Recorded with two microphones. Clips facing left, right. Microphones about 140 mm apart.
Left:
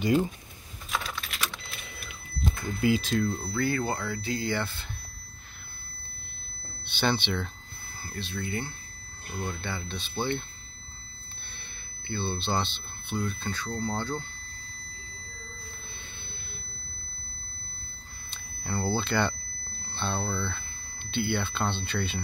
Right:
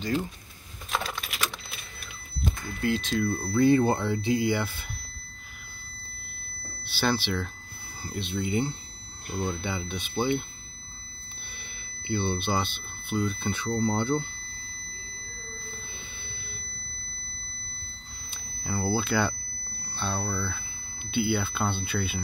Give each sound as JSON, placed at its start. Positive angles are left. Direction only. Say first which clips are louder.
{"t": 0.0, "sound": "speech", "louder": "left 4 dB", "side_deg": 15}
{"t": 1.1, "sound": "a sound", "louder": "right 1 dB", "side_deg": -10}
{"t": 2.8, "sound": "speech", "louder": "left 1 dB", "side_deg": 5}
{"t": 3.5, "sound": "speech", "louder": "right 10 dB", "side_deg": -25}
{"t": 6.9, "sound": "speech", "louder": "right 1 dB", "side_deg": -5}
{"t": 8.0, "sound": "speech", "louder": "right 4 dB", "side_deg": -15}
{"t": 12.1, "sound": "speech", "louder": "right 3 dB", "side_deg": -15}
{"t": 18.3, "sound": "smoke detector", "louder": "right 1 dB", "side_deg": -5}
{"t": 19.9, "sound": "speech", "louder": "even", "side_deg": -5}